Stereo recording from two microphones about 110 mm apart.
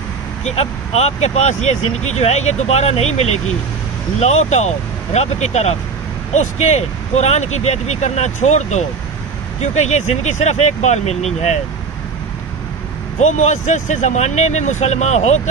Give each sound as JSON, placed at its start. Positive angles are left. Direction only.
{"t": 0.4, "sound": "speech", "side_deg": 80}
{"t": 4.2, "sound": "speech", "side_deg": 90}
{"t": 13.2, "sound": "speech", "side_deg": 90}